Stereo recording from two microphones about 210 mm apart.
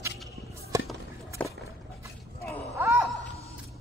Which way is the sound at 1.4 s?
5° left (ahead or behind).